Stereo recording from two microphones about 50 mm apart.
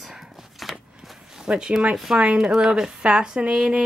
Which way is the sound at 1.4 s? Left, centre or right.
Centre.